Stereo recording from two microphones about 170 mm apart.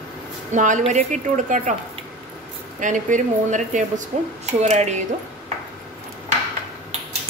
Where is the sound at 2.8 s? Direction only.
50° right (ahead or behind).